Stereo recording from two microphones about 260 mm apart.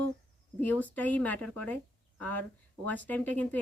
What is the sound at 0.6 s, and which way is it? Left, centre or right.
Speech, centre.